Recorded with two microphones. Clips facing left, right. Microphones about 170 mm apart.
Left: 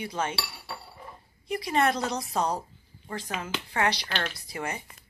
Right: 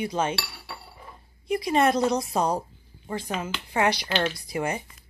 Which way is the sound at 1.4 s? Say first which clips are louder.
Right 4 dB; 15° right (ahead or behind).